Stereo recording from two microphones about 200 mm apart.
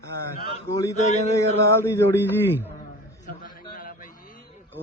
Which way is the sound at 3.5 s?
45° left (ahead or behind).